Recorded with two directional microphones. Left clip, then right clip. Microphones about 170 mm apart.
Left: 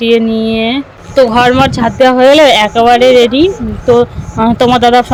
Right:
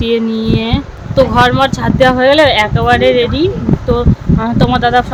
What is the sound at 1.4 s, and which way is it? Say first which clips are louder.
Speech: left 2 dB; 25° left (ahead or behind).